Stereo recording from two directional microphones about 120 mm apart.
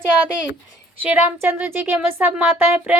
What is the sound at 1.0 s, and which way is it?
Speech, 15° right (ahead or behind).